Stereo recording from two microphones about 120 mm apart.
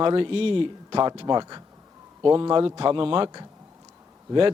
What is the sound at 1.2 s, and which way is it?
A man's voice, 35° right (ahead or behind).